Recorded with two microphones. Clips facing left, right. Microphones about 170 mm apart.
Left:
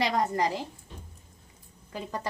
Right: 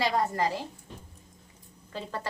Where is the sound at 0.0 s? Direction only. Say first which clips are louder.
Left 1 dB; 15° left (ahead or behind).